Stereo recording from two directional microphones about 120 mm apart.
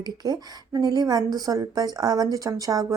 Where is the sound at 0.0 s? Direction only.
35° right (ahead or behind).